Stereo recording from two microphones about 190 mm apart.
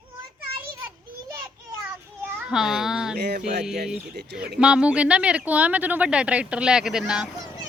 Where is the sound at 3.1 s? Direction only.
60° right (ahead or behind).